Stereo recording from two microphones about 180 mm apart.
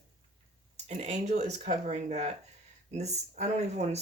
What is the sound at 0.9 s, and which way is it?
Speech, 35° right (ahead or behind).